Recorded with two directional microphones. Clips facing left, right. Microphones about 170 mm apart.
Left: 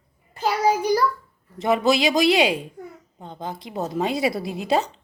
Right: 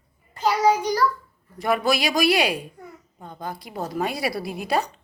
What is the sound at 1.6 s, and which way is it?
A woman's voice, 20° left (ahead or behind).